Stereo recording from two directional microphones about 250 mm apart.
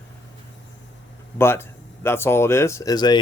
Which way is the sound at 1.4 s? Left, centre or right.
Centre.